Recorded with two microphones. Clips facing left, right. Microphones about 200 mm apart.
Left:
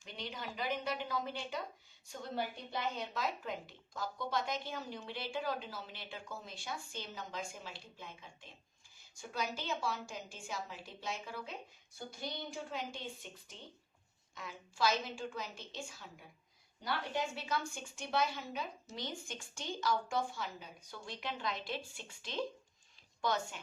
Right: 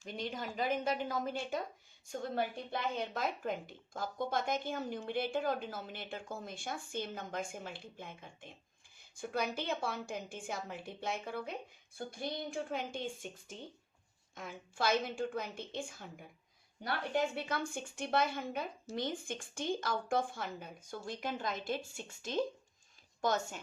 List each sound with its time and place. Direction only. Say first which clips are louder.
0.0 s a woman's voice: right 5 dB; 50° right (ahead or behind)